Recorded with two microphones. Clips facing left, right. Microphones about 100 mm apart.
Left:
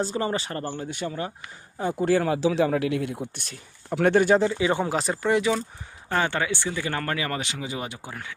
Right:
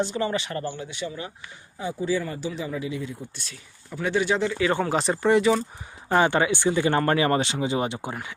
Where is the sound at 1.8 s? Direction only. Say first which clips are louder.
Left 4 dB; 60° left (ahead or behind).